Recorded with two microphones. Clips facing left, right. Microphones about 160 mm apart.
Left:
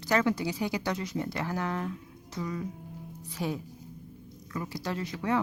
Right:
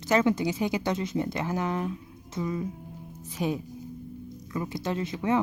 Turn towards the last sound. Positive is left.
turn(degrees=-20)  # may be behind; listen again after turning